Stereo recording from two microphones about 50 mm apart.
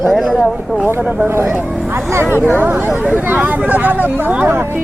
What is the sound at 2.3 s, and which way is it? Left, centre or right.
Speech, right.